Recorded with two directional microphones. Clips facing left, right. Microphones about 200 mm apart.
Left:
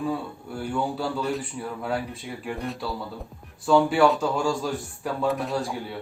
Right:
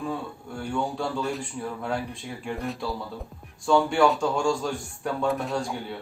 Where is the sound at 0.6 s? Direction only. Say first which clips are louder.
Left 1 dB; 5° left (ahead or behind).